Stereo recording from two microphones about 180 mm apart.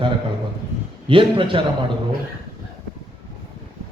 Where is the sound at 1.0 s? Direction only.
30° right (ahead or behind).